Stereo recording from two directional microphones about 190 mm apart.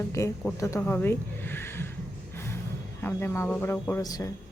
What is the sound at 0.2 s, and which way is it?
Speech, 15° left (ahead or behind).